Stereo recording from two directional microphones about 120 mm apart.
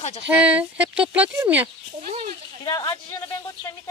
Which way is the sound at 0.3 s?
10° right (ahead or behind).